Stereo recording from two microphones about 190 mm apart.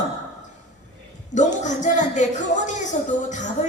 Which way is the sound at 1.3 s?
40° left (ahead or behind).